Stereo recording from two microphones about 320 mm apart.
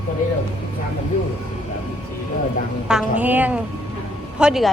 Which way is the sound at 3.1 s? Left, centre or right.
Centre.